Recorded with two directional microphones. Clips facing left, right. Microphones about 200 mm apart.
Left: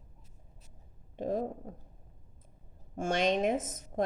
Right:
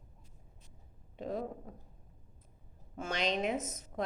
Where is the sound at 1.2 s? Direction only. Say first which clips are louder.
Left 5 dB; 45° left (ahead or behind).